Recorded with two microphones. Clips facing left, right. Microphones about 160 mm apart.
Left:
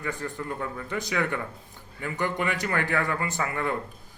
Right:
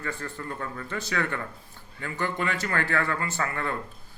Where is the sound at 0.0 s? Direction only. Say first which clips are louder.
Left 2 dB; 15° left (ahead or behind).